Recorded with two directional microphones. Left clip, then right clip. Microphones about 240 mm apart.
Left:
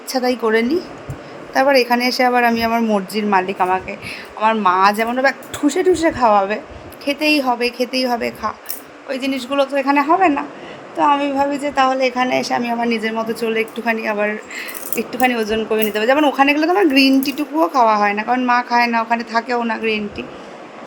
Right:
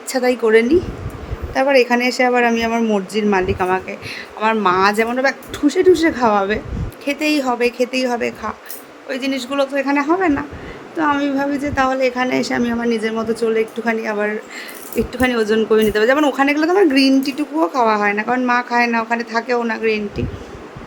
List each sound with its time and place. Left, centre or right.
0.1 s speech: centre